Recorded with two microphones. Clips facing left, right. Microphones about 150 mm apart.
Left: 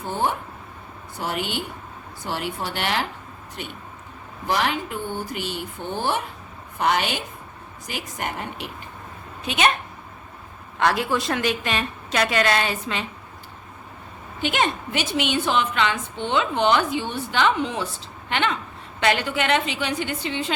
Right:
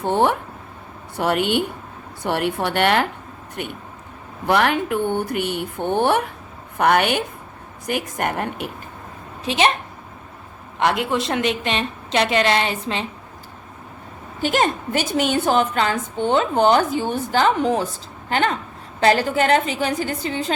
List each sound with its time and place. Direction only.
0.0 s speech: 70° right (ahead or behind); by 8.7 s 55° right (ahead or behind)
9.4 s a woman's voice: 30° right (ahead or behind)
10.8 s a woman's voice: 20° right (ahead or behind)
14.4 s a woman's voice: 40° right (ahead or behind)